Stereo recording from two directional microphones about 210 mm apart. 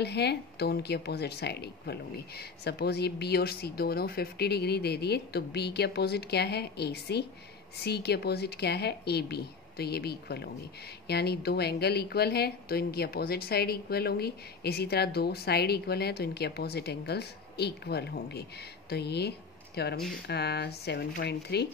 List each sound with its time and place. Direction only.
0.0 s a woman's voice: 50° left (ahead or behind)